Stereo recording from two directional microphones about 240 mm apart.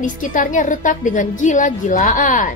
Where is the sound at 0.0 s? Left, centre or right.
Left.